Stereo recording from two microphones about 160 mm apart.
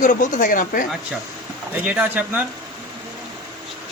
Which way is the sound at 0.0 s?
55° left (ahead or behind).